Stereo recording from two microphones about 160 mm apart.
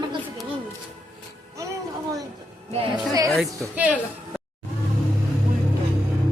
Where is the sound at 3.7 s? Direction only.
10° right (ahead or behind).